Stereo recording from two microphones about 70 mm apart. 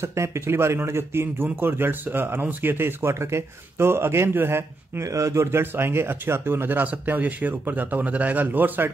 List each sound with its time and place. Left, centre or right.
0.0 s speech: right
5.0 s speech: right